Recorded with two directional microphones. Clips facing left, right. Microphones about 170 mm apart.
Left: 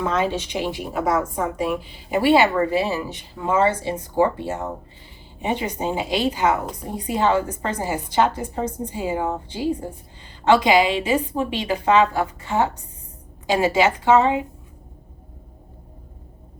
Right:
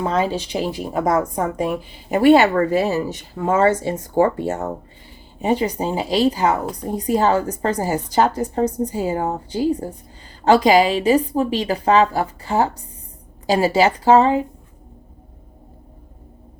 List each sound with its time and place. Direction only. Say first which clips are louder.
0.0 s a woman's voice: right 2 dB; 35° right (ahead or behind)